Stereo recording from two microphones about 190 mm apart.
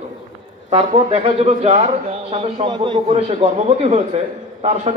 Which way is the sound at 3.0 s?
35° right (ahead or behind).